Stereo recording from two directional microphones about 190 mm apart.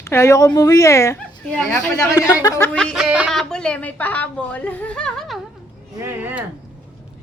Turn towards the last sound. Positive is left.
turn(degrees=-10)  # may be behind; listen again after turning